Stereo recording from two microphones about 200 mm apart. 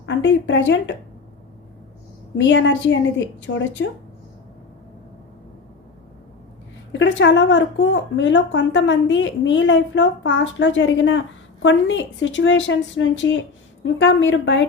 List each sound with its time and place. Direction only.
0.0 s a woman's voice: 65° left (ahead or behind)
2.4 s a woman's voice: 65° left (ahead or behind)
6.9 s a woman's voice: 65° left (ahead or behind)